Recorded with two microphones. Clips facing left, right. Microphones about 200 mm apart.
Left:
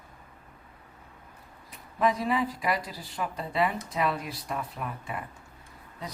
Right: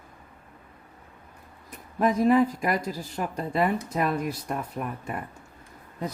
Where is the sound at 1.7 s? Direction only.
50° right (ahead or behind).